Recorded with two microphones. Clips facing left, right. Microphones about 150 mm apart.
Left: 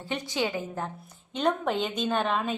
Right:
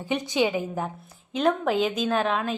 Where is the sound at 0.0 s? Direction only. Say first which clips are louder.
Right 5 dB; 15° right (ahead or behind).